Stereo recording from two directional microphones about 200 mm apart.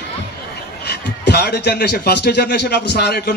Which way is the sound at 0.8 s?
55° left (ahead or behind).